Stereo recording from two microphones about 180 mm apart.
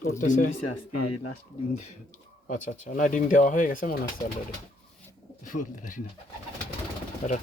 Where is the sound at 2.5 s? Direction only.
45° left (ahead or behind).